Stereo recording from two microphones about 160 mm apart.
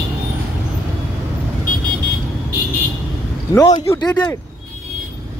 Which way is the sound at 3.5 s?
25° left (ahead or behind).